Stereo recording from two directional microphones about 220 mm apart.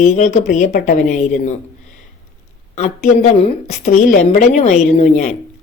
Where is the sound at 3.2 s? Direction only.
30° left (ahead or behind).